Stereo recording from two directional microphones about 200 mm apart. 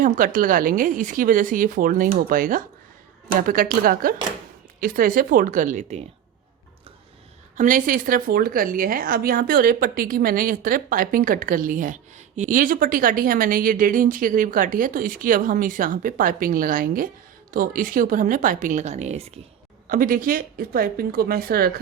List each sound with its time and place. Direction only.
0.0 s a woman's voice: 45° right (ahead or behind)
7.5 s a woman's voice: 40° right (ahead or behind)
19.9 s a woman's voice: 45° right (ahead or behind)